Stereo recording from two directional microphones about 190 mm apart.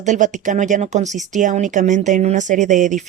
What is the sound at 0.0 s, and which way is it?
Speech, 40° right (ahead or behind).